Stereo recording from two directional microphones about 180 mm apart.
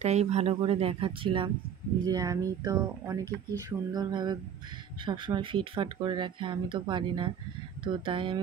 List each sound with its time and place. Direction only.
0.0 s speech: 35° right (ahead or behind)